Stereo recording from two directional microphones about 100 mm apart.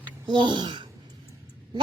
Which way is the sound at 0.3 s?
55° right (ahead or behind).